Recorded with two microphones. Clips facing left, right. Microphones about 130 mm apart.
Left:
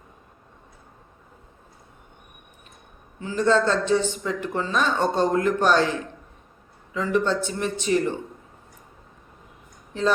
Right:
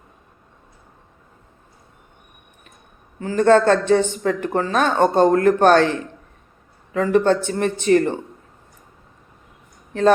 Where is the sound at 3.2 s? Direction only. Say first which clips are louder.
Right 6 dB; 55° right (ahead or behind).